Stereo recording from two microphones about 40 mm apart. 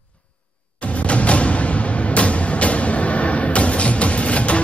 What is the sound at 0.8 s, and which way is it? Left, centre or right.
Music, left.